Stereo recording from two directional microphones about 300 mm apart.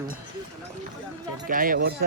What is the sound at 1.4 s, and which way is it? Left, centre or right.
Speech, right.